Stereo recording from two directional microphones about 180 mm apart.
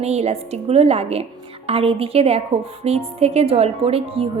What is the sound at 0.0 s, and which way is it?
A woman's voice, 35° right (ahead or behind).